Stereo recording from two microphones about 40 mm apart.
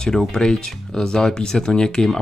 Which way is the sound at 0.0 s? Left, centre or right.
Centre.